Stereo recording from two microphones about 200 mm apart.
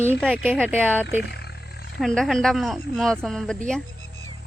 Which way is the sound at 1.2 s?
55° left (ahead or behind).